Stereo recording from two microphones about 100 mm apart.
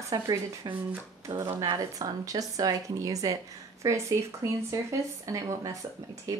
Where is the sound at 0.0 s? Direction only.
35° right (ahead or behind).